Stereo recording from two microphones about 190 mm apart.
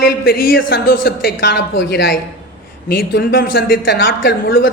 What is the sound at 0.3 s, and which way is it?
Speech, 55° left (ahead or behind).